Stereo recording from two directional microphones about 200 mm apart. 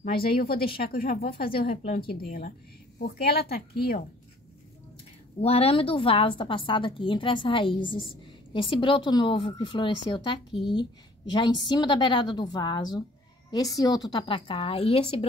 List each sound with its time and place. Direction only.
0.0 s speech: 50° left (ahead or behind)
5.4 s a woman's voice: 30° left (ahead or behind)